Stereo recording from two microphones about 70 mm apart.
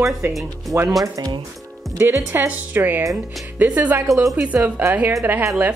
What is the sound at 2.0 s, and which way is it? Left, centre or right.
Speech, right.